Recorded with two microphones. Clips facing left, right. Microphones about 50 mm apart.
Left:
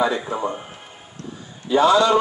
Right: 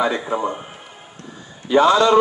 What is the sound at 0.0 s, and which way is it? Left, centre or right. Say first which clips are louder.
Speech: right 1 dB; right.